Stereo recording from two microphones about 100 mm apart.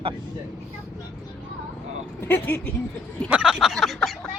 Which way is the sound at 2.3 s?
20° left (ahead or behind).